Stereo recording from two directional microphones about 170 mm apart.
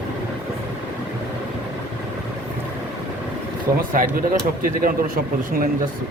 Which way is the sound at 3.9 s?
55° right (ahead or behind).